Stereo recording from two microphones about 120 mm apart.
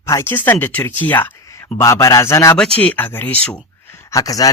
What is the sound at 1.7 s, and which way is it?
Speech, 25° left (ahead or behind).